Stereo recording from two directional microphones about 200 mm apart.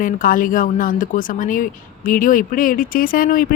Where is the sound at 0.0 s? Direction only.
45° left (ahead or behind).